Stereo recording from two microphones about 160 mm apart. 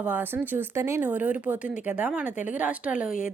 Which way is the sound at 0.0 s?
10° right (ahead or behind).